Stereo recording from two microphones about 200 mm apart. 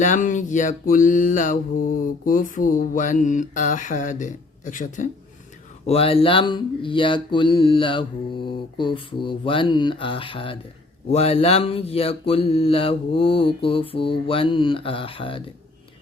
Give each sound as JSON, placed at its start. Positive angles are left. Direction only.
{"t": 0.0, "sound": "speech", "side_deg": 40}
{"t": 5.8, "sound": "mantra", "side_deg": 30}